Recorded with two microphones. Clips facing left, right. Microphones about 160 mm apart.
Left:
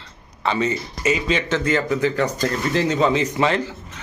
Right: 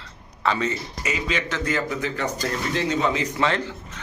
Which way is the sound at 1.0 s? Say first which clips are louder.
Left 6 dB; 25° left (ahead or behind).